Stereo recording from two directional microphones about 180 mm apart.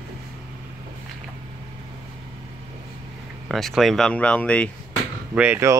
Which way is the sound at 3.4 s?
Centre (ahead or behind).